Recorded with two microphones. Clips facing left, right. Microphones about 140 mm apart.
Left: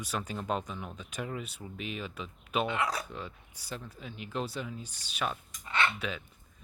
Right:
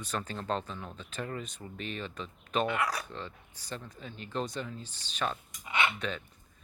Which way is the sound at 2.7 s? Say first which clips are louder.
Even; 20° left (ahead or behind).